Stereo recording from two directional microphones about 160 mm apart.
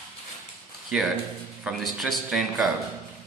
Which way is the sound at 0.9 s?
5° right (ahead or behind).